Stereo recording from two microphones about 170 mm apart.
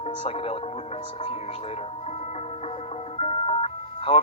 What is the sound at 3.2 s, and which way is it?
Music, 40° left (ahead or behind).